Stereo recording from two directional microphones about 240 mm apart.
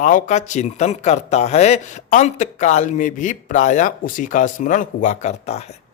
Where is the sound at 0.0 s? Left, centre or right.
Left.